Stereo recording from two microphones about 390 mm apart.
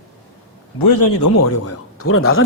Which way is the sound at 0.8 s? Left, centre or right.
Left.